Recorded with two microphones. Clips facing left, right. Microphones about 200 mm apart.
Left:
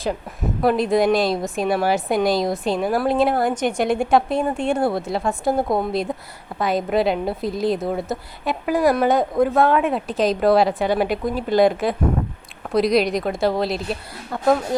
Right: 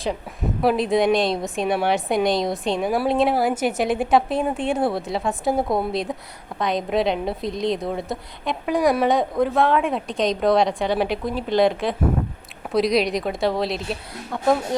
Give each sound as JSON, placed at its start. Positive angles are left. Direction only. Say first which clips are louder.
{"t": 0.6, "sound": "a woman's voice", "louder": "left 1 dB", "side_deg": 0}